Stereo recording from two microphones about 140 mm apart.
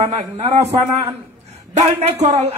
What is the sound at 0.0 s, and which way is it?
Speech, 50° right (ahead or behind).